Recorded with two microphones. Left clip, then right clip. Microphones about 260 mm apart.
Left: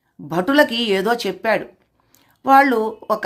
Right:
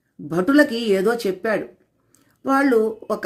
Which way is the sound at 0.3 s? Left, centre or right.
Centre.